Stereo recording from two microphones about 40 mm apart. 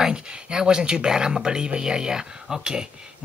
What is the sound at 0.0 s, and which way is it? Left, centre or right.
Speech, right.